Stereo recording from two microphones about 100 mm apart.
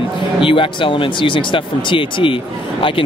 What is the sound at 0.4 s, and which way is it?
Speech, 60° left (ahead or behind).